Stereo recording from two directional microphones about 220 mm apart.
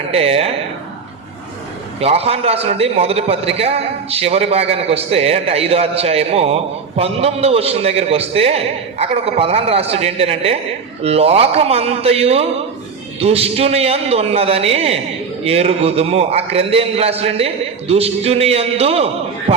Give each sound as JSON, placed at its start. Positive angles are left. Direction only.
{"t": 0.1, "sound": "a man's voice", "side_deg": -25}
{"t": 2.0, "sound": "a man's voice", "side_deg": -25}